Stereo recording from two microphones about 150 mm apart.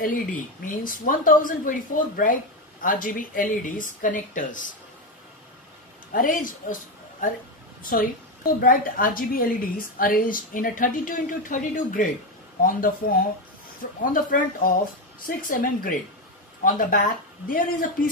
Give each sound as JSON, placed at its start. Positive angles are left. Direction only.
{"t": 0.0, "sound": "a woman's voice", "side_deg": 65}
{"t": 6.1, "sound": "a woman's voice", "side_deg": 65}
{"t": 8.5, "sound": "a woman's voice", "side_deg": 70}